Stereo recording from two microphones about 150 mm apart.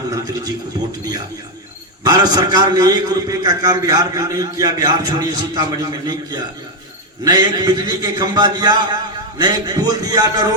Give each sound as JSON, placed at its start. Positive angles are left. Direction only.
{"t": 0.1, "sound": "a man's voice", "side_deg": -25}
{"t": 2.0, "sound": "a man's voice", "side_deg": -25}